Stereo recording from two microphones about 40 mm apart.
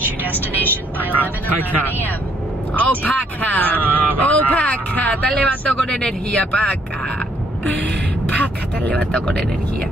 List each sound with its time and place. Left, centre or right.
0.9 s speech: left
5.9 s speech: left
7.6 s speech: left
9.2 s speech: left